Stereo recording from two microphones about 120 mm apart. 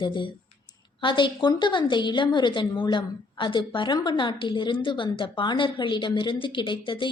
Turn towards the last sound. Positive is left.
turn(degrees=40)  # may be behind; listen again after turning